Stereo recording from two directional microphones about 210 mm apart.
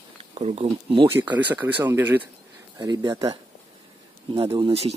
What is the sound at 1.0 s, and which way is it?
Speech, 10° right (ahead or behind).